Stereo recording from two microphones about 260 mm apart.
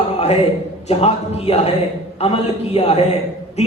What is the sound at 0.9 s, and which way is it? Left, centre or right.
Speech, left.